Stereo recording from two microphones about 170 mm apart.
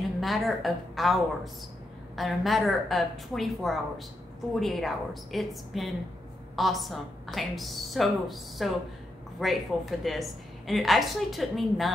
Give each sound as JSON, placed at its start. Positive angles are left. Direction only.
{"t": 0.2, "sound": "a woman's voice", "side_deg": 0}